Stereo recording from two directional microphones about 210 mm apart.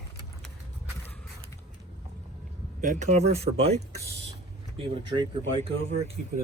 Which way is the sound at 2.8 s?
35° right (ahead or behind).